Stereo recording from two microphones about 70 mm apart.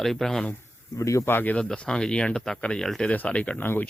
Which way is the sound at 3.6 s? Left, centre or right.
Left.